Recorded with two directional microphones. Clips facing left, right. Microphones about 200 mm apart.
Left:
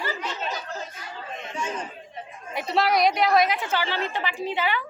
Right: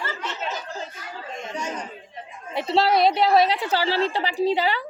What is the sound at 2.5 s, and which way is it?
A woman's voice, 30° right (ahead or behind).